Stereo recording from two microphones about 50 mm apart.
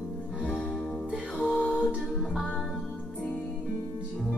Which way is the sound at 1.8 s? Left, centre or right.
Centre.